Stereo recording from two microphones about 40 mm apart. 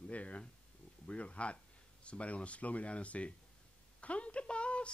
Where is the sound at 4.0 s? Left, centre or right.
Left.